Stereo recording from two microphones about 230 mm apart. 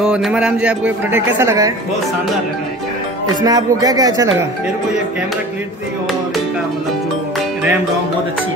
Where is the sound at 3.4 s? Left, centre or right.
Centre.